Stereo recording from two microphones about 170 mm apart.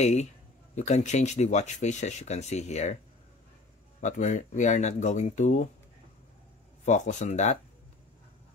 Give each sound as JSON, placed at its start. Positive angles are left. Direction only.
{"t": 0.0, "sound": "speech", "side_deg": 40}
{"t": 4.0, "sound": "speech", "side_deg": 45}
{"t": 6.8, "sound": "speech", "side_deg": 45}